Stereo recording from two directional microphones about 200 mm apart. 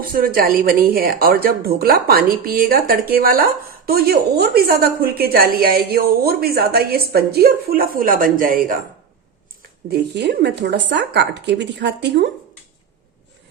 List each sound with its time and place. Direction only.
0.0 s a woman's voice: 45° right (ahead or behind)
9.9 s speech: 60° right (ahead or behind)